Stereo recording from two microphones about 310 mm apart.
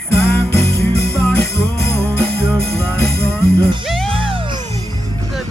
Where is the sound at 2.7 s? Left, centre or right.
Centre.